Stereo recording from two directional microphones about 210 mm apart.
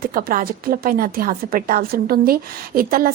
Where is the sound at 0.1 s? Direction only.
45° right (ahead or behind).